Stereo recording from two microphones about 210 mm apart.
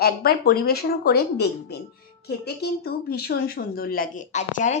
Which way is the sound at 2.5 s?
50° left (ahead or behind).